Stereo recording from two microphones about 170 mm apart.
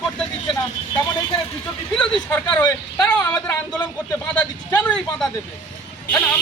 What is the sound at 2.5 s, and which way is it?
Speech, 10° left (ahead or behind).